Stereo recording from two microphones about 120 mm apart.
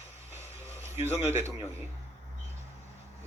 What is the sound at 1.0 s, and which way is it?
Speech, 20° right (ahead or behind).